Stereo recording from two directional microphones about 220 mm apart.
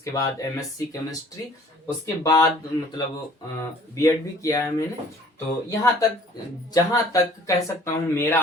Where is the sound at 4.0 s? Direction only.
15° left (ahead or behind).